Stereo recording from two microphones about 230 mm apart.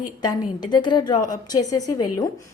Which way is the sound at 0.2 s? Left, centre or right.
Centre.